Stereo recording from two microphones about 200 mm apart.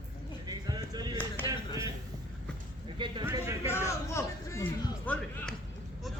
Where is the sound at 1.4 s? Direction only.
10° left (ahead or behind).